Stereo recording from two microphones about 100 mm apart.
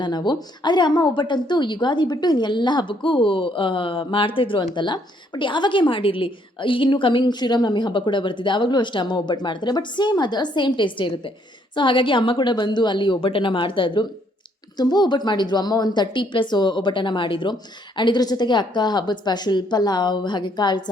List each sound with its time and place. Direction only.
0.0 s a woman's voice: 45° left (ahead or behind)
14.8 s a woman's voice: 45° left (ahead or behind)